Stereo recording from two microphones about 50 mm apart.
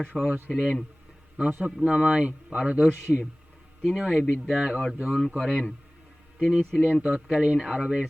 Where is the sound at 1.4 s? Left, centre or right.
Right.